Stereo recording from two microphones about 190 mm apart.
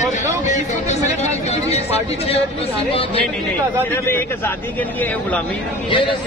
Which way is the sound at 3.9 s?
10° left (ahead or behind).